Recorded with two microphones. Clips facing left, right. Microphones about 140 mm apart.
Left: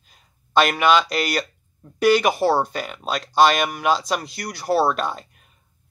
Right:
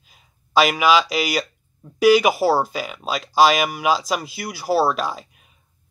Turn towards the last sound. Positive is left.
turn(degrees=-5)  # may be behind; listen again after turning